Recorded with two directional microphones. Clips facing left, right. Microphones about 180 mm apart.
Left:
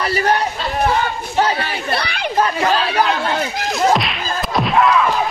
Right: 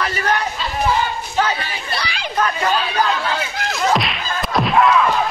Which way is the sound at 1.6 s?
60° left (ahead or behind).